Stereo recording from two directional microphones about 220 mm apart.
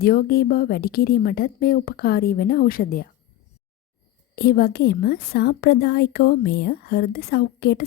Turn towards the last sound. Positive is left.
turn(degrees=45)  # may be behind; listen again after turning